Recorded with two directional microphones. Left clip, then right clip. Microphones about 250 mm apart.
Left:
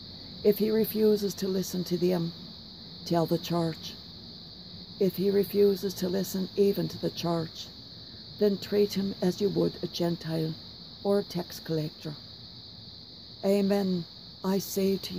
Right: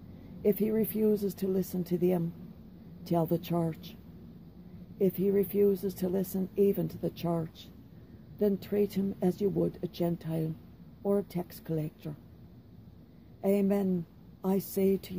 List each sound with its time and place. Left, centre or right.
0.4 s speech: left
4.9 s speech: left
13.4 s speech: left